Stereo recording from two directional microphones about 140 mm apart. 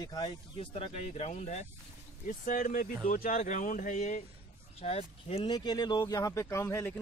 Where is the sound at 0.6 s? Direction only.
50° left (ahead or behind).